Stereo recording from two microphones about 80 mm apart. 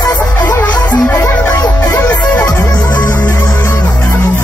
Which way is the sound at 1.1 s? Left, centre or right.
Left.